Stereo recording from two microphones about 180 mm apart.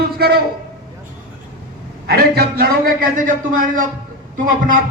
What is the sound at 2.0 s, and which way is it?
A man's voice, 60° right (ahead or behind).